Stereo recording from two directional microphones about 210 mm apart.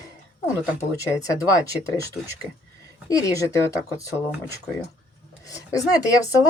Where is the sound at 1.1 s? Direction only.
15° left (ahead or behind).